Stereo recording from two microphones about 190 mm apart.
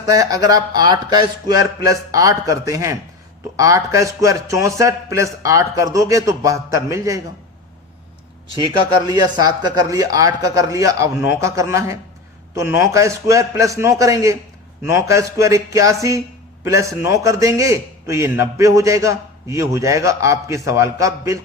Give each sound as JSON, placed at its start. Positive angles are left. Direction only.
{"t": 0.0, "sound": "a man's voice", "side_deg": -20}
{"t": 8.5, "sound": "a man's voice", "side_deg": -25}